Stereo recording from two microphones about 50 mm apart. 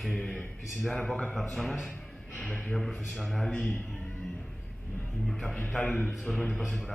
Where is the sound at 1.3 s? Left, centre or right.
Centre.